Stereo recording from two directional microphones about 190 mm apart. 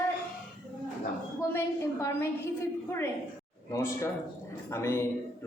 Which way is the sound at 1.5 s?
10° left (ahead or behind).